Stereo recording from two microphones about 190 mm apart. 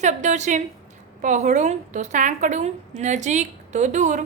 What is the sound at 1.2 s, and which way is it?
A woman's voice, 40° right (ahead or behind).